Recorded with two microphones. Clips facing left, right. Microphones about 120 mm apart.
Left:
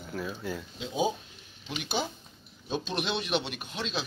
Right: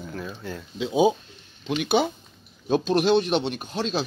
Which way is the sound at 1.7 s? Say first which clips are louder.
Right 10 dB; 65° right (ahead or behind).